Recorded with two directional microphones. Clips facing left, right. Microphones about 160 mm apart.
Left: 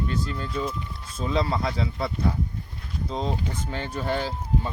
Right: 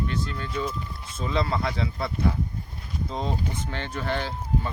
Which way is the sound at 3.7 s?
10° left (ahead or behind).